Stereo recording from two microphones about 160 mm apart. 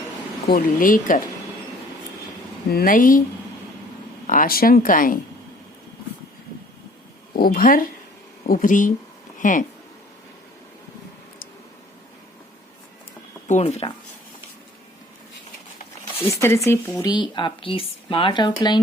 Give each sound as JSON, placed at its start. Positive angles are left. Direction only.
{"t": 0.4, "sound": "speech", "side_deg": 60}
{"t": 2.6, "sound": "speech", "side_deg": 65}
{"t": 4.3, "sound": "speech", "side_deg": 60}
{"t": 7.3, "sound": "speech", "side_deg": 65}
{"t": 13.5, "sound": "speech", "side_deg": 45}
{"t": 16.1, "sound": "speech", "side_deg": 15}
{"t": 17.0, "sound": "speech", "side_deg": 25}